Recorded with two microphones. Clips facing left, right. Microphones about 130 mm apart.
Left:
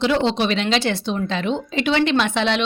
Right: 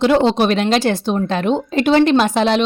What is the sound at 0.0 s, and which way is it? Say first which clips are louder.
A woman's voice: right 5 dB; 45° right (ahead or behind).